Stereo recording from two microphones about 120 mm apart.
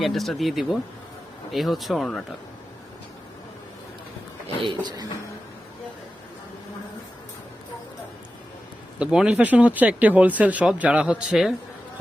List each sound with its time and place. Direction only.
0.0 s speech: centre (ahead or behind)
4.6 s speech: 40° right (ahead or behind)
9.0 s speech: 5° right (ahead or behind)